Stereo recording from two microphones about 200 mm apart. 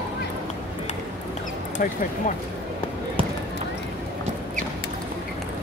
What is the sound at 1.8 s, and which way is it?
Speech, 40° left (ahead or behind).